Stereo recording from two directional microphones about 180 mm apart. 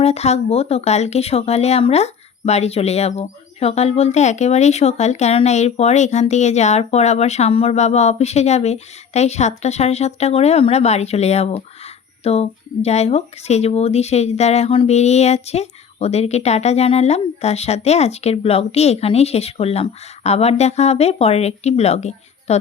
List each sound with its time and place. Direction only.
0.0 s speech: 35° left (ahead or behind)